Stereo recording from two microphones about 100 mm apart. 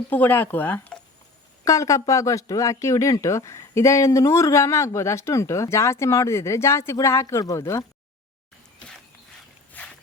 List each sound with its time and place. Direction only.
0.1 s speech: 20° left (ahead or behind)
1.6 s speech: 35° left (ahead or behind)
9.7 s walk: 15° left (ahead or behind)